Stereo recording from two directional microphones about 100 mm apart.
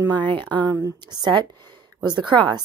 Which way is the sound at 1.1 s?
40° right (ahead or behind).